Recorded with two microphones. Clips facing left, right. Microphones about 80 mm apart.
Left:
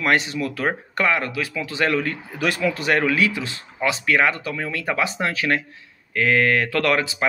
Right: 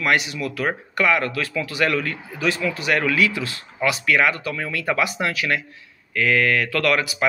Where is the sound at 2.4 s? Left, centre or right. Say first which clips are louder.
Left 1 dB; left.